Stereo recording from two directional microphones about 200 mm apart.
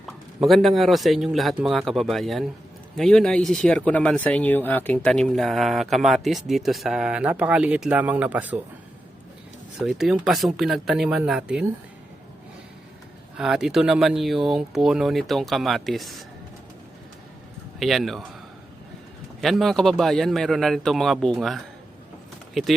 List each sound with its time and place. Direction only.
0.0 s speech: centre (ahead or behind)
9.8 s speech: centre (ahead or behind)
13.3 s speech: 5° right (ahead or behind)
17.7 s speech: centre (ahead or behind)
19.4 s speech: centre (ahead or behind)
22.6 s speech: centre (ahead or behind)